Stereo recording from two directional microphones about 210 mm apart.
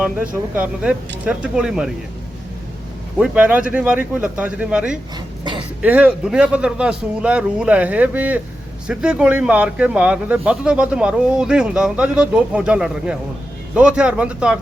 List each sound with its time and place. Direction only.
0.5 s speech: 5° right (ahead or behind)
3.2 s speech: 5° right (ahead or behind)
5.1 s a sound: 20° right (ahead or behind)
5.8 s speech: 5° right (ahead or behind)